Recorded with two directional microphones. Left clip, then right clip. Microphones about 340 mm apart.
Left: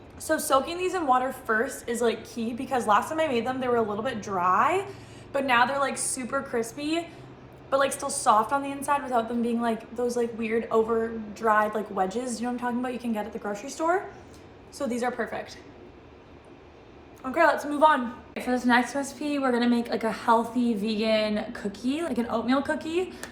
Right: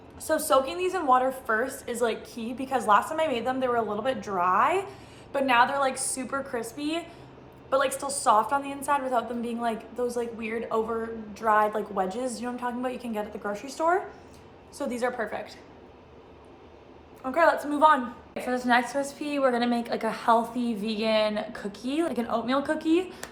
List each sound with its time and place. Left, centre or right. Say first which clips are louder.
0.3 s a woman's voice: right 1 dB; centre
8.0 s a woman's voice: even; centre
17.2 s a woman's voice: even; centre